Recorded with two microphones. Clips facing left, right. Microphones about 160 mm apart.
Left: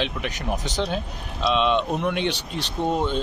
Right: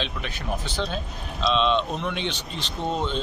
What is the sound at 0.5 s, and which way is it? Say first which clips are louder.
Speech: left 3 dB; 15° left (ahead or behind).